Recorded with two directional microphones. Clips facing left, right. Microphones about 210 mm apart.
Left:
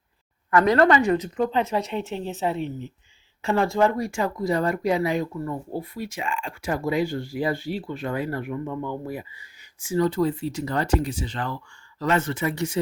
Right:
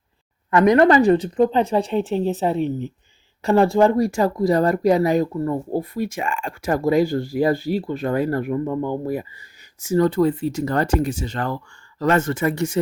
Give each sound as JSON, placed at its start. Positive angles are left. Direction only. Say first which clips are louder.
{"t": 0.5, "sound": "speech", "louder": "right 4 dB", "side_deg": -20}
{"t": 0.9, "sound": "speech", "louder": "right 5 dB", "side_deg": -35}